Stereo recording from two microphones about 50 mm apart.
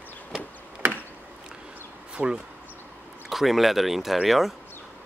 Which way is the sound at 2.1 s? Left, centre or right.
Centre.